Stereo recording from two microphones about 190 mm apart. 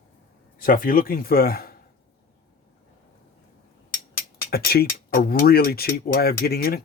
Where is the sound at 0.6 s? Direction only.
45° left (ahead or behind).